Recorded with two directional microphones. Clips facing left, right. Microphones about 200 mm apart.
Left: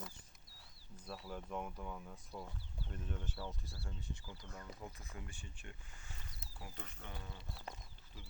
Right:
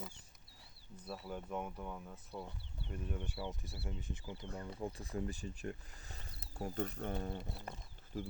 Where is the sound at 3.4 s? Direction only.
20° right (ahead or behind).